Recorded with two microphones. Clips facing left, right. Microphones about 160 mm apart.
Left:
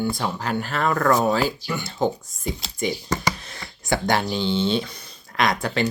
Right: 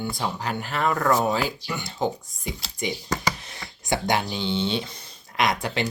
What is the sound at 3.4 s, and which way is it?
Speech, 20° right (ahead or behind).